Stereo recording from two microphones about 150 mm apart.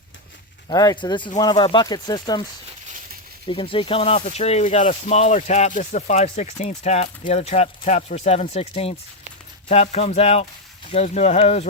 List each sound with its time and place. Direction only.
0.7 s speech: 25° left (ahead or behind)
3.4 s speech: 35° left (ahead or behind)